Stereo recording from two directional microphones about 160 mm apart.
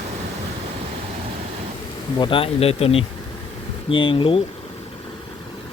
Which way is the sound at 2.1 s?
30° left (ahead or behind).